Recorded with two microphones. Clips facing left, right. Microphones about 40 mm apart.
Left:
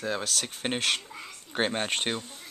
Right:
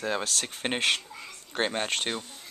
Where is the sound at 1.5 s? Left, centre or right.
Centre.